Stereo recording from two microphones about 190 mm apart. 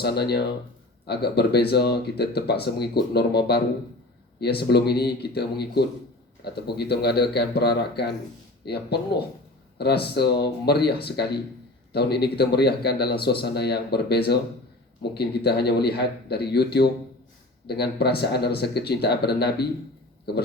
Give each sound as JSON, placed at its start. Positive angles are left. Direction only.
{"t": 0.0, "sound": "speech", "side_deg": 55}